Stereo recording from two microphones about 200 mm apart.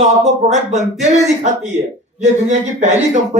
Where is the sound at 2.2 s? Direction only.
35° right (ahead or behind).